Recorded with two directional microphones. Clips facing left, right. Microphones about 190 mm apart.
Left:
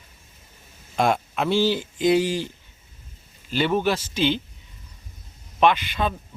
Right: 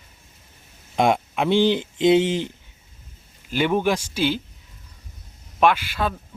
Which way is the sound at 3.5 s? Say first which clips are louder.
Right 1 dB; 10° right (ahead or behind).